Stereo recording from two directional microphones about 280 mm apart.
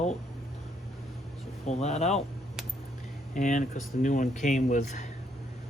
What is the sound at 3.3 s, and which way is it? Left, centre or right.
Speech, left.